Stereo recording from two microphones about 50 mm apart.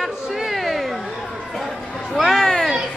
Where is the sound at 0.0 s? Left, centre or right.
Centre.